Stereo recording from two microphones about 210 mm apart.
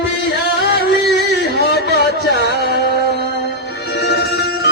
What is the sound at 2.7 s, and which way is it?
Music, 50° left (ahead or behind).